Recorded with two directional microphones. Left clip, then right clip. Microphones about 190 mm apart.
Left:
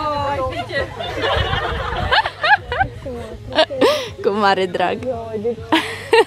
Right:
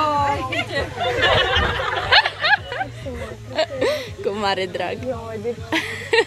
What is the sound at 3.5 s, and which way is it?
Speech, 50° left (ahead or behind).